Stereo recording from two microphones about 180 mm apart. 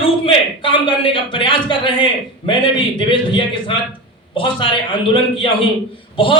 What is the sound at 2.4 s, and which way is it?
A man's voice, 25° left (ahead or behind).